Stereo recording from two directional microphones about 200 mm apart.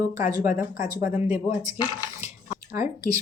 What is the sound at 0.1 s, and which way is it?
Speech, 20° right (ahead or behind).